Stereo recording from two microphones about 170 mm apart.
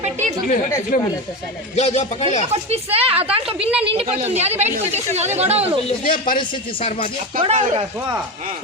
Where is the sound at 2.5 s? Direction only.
35° right (ahead or behind).